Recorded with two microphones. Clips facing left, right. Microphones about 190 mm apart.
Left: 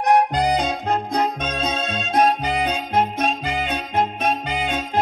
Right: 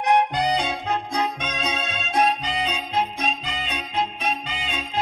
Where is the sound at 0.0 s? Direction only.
40° left (ahead or behind).